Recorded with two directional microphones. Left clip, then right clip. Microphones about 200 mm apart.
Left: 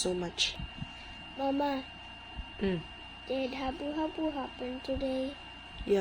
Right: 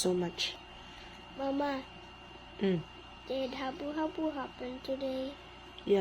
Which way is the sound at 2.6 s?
10° right (ahead or behind).